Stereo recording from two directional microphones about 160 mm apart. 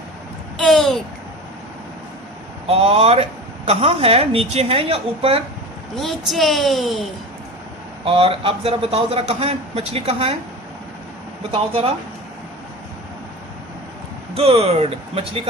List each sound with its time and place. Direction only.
0.6 s a sound: centre (ahead or behind)
2.6 s a man's voice: 35° right (ahead or behind)
6.0 s a woman's voice: centre (ahead or behind)
8.0 s a man's voice: 35° right (ahead or behind)
11.5 s a man's voice: 35° right (ahead or behind)
14.3 s a man's voice: 35° right (ahead or behind)